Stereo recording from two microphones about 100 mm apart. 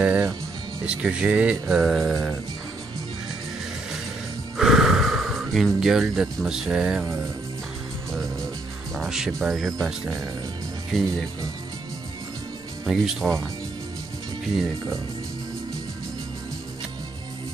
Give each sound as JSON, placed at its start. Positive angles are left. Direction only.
{"t": 0.0, "sound": "music", "side_deg": -20}
{"t": 0.8, "sound": "speech", "side_deg": -10}
{"t": 4.6, "sound": "speech", "side_deg": -5}
{"t": 8.9, "sound": "speech", "side_deg": -5}
{"t": 10.9, "sound": "speech", "side_deg": 0}
{"t": 12.8, "sound": "speech", "side_deg": -5}